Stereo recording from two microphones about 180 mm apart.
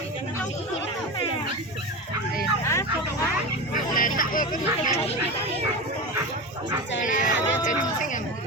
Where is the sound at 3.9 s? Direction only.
50° left (ahead or behind).